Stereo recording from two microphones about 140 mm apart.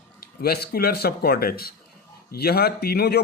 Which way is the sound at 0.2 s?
90° left.